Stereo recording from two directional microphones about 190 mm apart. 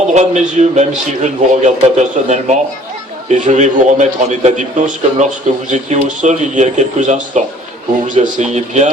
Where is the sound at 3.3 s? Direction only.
40° right (ahead or behind).